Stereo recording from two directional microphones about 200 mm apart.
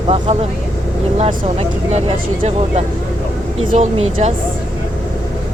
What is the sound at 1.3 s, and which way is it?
Speech, 35° right (ahead or behind).